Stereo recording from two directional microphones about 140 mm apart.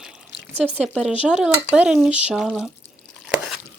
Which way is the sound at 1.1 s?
10° right (ahead or behind).